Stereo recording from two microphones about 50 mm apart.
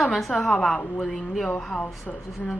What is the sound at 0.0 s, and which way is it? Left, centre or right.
A woman's voice, centre.